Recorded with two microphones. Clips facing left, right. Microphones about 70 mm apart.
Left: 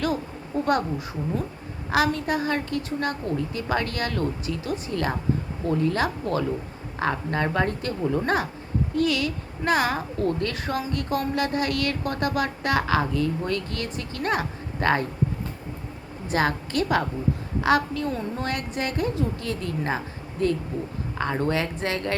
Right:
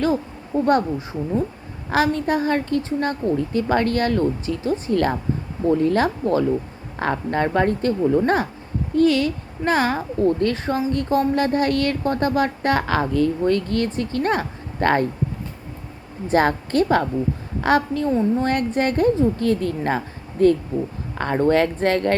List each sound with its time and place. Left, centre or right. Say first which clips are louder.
0.0 s a woman's voice: right 5 dB; right
16.3 s a woman's voice: right 6 dB; right
18.1 s speech: right 10 dB; right
18.4 s a woman's voice: right 8 dB; right
21.2 s speech: right 7 dB; right